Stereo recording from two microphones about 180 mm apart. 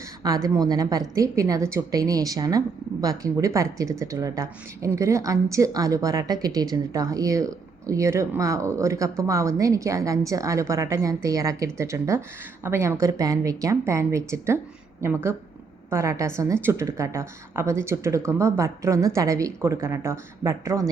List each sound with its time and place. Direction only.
0.2 s a woman's voice: 20° right (ahead or behind)